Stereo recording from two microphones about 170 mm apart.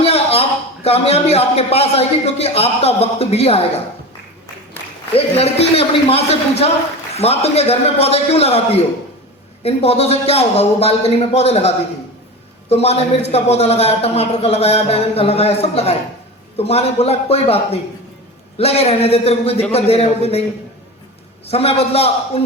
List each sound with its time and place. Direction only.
0.0 s a sound: 35° left (ahead or behind)
0.9 s a man's voice: 35° left (ahead or behind)
5.1 s a man's voice: 35° left (ahead or behind)
21.4 s a man's voice: 35° left (ahead or behind)